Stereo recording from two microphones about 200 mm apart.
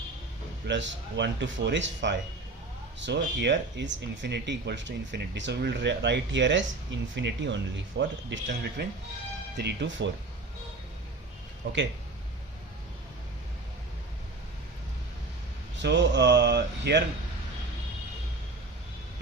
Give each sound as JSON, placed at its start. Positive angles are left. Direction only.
{"t": 0.7, "sound": "speech", "side_deg": -65}
{"t": 11.6, "sound": "speech", "side_deg": -55}
{"t": 15.8, "sound": "speech", "side_deg": -60}